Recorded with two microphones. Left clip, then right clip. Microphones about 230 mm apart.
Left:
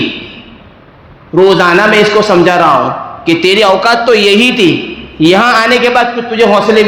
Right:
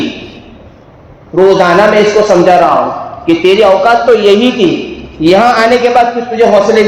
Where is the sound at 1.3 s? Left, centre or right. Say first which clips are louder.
Even; left.